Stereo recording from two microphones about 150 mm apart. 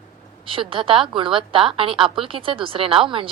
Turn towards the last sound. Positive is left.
turn(degrees=-35)  # may be behind; listen again after turning